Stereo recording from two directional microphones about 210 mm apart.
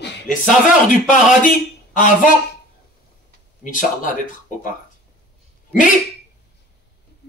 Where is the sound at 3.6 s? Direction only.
40° left (ahead or behind).